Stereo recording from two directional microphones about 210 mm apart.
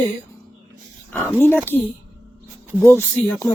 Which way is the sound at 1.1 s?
10° left (ahead or behind).